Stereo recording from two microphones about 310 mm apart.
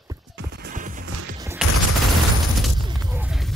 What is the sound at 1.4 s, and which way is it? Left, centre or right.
Fusillade, centre.